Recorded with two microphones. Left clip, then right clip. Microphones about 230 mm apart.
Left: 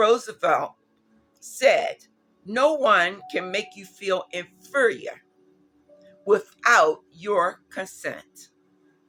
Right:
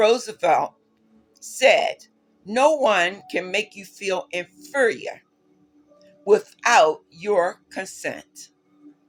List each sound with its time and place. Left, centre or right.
0.0 s speech: centre